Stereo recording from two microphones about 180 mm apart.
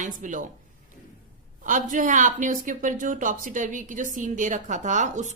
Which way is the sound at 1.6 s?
45° right (ahead or behind).